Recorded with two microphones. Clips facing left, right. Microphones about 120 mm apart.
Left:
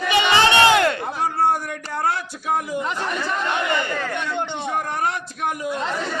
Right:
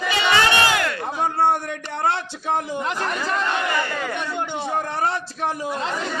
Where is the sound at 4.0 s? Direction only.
10° right (ahead or behind).